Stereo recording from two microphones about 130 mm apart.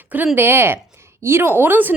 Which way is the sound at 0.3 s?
15° right (ahead or behind).